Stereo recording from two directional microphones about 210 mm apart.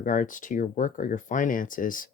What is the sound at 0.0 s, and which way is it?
Speech, 40° left (ahead or behind).